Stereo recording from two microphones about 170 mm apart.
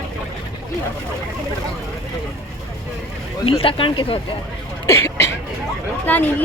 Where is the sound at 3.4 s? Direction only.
35° left (ahead or behind).